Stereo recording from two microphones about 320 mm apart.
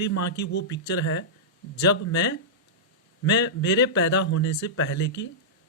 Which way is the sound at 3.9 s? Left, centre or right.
Left.